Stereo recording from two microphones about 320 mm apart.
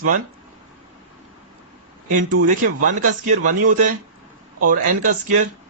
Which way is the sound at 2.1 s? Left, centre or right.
Right.